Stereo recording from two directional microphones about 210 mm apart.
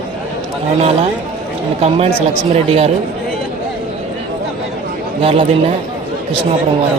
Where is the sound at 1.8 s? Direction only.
30° right (ahead or behind).